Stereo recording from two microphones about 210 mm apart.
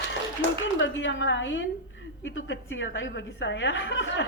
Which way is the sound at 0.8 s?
60° left (ahead or behind).